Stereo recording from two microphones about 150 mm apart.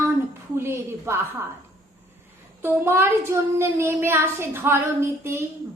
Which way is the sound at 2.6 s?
15° right (ahead or behind).